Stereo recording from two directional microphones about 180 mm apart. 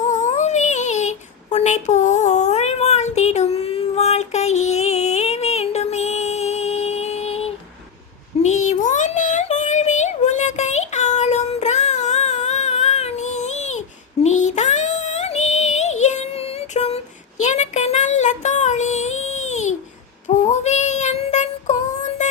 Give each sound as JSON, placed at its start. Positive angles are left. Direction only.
{"t": 0.1, "sound": "a sound", "side_deg": 40}
{"t": 8.4, "sound": "child singing", "side_deg": 40}
{"t": 14.3, "sound": "music", "side_deg": 40}
{"t": 17.4, "sound": "child singing", "side_deg": 40}
{"t": 22.2, "sound": "music", "side_deg": 40}